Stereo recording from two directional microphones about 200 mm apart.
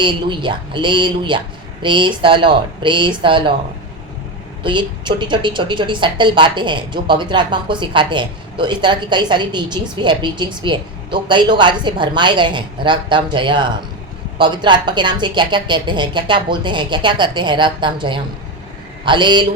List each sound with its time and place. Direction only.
0.0 s a woman's voice: 25° right (ahead or behind)
4.6 s a woman's voice: 25° right (ahead or behind)